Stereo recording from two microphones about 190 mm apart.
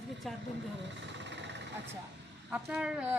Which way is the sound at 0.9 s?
70° right (ahead or behind).